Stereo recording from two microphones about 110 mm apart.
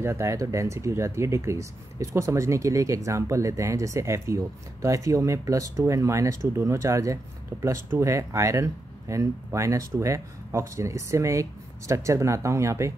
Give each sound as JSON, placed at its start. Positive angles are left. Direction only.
{"t": 0.0, "sound": "speech", "side_deg": -25}